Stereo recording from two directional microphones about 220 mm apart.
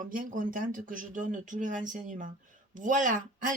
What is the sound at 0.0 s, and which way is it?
Speech, 40° right (ahead or behind).